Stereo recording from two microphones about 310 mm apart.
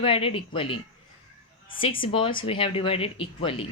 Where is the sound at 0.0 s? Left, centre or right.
Centre.